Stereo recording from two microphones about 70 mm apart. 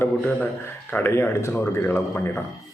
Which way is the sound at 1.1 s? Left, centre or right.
Left.